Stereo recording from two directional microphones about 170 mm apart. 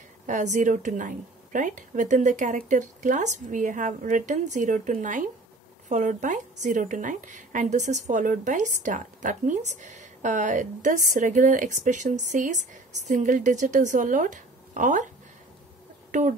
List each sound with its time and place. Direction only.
0.3 s a woman's voice: 45° right (ahead or behind)
16.1 s speech: 45° right (ahead or behind)